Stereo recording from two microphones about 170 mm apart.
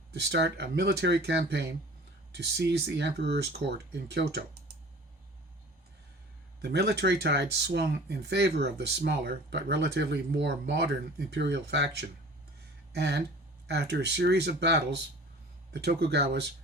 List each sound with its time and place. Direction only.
0.1 s speech: 80° right
6.6 s speech: 70° right (ahead or behind)
11.3 s speech: 90° right
12.9 s speech: 75° right (ahead or behind)